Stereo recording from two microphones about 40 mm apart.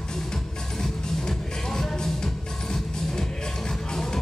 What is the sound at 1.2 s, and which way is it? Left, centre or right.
Music, centre.